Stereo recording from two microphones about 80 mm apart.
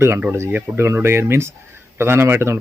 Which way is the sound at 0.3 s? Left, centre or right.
Right.